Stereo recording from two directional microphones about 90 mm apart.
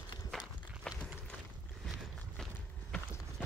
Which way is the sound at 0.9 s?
10° left (ahead or behind).